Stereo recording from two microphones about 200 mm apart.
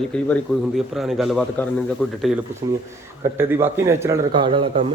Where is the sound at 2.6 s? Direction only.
20° right (ahead or behind).